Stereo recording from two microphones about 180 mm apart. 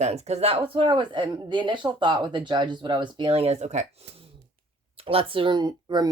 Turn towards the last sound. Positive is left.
turn(degrees=-25)  # may be behind; listen again after turning